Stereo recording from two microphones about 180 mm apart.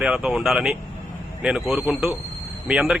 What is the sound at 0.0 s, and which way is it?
A man's voice, 5° right (ahead or behind).